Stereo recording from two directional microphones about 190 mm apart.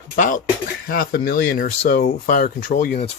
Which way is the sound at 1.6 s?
50° left (ahead or behind).